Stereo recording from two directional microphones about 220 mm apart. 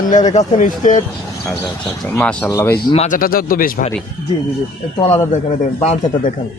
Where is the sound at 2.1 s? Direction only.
10° left (ahead or behind).